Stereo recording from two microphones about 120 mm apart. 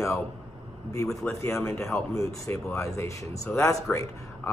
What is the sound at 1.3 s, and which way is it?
Speech, 25° left (ahead or behind).